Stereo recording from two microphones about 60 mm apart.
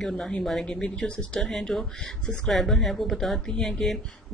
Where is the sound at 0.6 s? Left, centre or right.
Centre.